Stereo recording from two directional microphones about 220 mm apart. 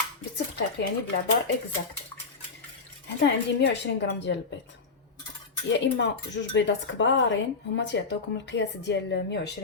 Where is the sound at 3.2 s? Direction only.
50° left (ahead or behind).